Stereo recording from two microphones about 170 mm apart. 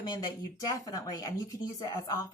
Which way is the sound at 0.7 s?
20° left (ahead or behind).